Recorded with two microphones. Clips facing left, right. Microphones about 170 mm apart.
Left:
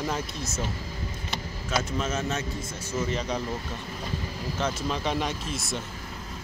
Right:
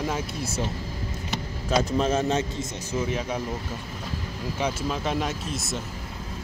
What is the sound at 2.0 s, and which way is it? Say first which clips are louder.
Speech: right 6 dB; 30° right (ahead or behind).